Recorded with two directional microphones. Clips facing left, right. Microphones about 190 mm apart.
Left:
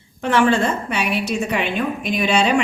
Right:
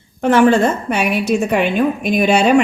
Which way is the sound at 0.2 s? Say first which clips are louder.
Right 5 dB; 45° right (ahead or behind).